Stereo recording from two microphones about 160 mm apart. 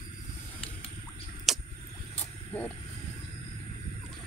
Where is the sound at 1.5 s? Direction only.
Centre (ahead or behind).